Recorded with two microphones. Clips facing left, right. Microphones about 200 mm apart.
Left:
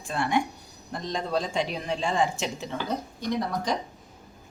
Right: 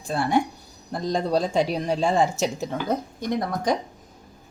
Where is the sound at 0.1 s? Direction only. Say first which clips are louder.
Right 4 dB; 35° right (ahead or behind).